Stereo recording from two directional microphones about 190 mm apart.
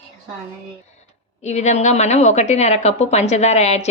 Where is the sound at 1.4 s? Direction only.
35° left (ahead or behind).